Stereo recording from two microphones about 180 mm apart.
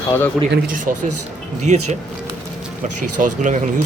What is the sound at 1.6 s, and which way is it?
Speech, 40° right (ahead or behind).